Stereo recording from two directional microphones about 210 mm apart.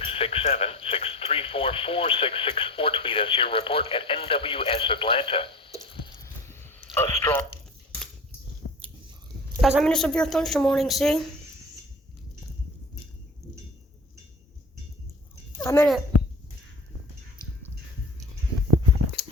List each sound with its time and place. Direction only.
0.0 s speech: 25° left (ahead or behind)
5.9 s a sound: 20° left (ahead or behind)
9.6 s speech: centre (ahead or behind)
15.5 s a child's voice: 10° left (ahead or behind)